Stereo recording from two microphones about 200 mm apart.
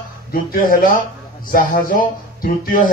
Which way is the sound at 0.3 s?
45° left (ahead or behind).